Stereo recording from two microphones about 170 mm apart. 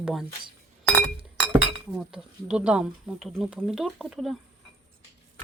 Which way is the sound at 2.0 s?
5° right (ahead or behind).